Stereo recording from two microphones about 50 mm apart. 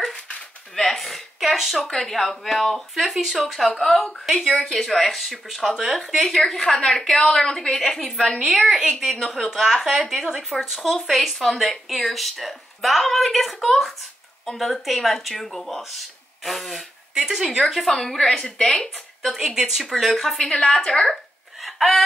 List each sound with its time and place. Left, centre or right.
0.7 s speech: centre
8.6 s speech: centre
17.1 s a woman's voice: centre
18.6 s a woman's voice: centre
19.3 s speech: centre
19.9 s a woman's voice: centre
21.0 s a sound: centre